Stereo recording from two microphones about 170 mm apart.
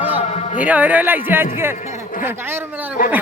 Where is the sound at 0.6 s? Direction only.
10° right (ahead or behind).